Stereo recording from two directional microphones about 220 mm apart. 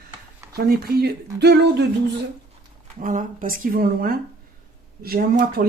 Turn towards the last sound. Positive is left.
turn(degrees=-45)  # may be behind; listen again after turning